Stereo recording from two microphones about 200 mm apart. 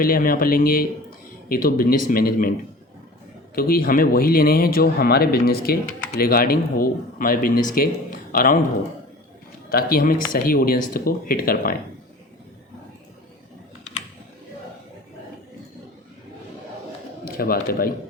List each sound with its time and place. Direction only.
0.0 s speech: 45° left (ahead or behind)
3.5 s speech: 45° left (ahead or behind)
9.6 s speech: 50° left (ahead or behind)
17.2 s speech: 50° left (ahead or behind)